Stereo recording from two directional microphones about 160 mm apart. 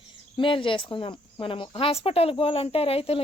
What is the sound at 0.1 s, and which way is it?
Speech, 30° left (ahead or behind).